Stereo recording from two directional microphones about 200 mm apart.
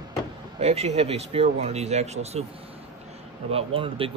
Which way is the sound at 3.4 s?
30° right (ahead or behind).